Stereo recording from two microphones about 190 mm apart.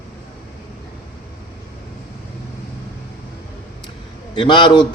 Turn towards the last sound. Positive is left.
turn(degrees=25)  # may be behind; listen again after turning